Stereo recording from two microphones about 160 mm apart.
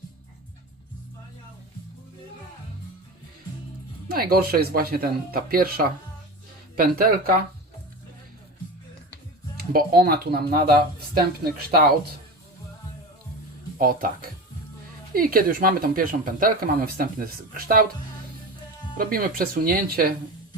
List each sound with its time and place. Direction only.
4.1 s speech: 70° right (ahead or behind)
9.6 s speech: 70° right (ahead or behind)
13.7 s speech: 60° right (ahead or behind)
18.9 s speech: 65° right (ahead or behind)